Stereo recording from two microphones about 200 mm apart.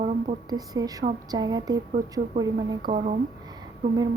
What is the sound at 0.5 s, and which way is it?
A woman's voice, 20° right (ahead or behind).